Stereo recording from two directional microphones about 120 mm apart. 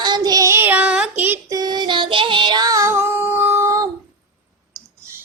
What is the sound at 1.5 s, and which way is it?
Music, 35° right (ahead or behind).